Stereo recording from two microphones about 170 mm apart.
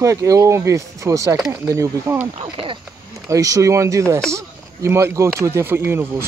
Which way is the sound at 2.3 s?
30° right (ahead or behind).